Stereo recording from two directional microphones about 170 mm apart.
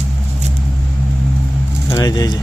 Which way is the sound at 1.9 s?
20° left (ahead or behind).